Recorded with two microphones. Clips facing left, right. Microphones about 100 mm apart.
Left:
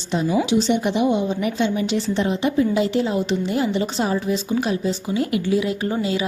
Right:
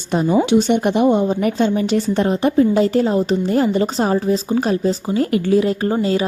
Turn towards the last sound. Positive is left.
turn(degrees=-40)  # may be behind; listen again after turning